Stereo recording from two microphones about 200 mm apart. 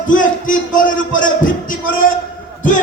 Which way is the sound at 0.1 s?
40° left (ahead or behind).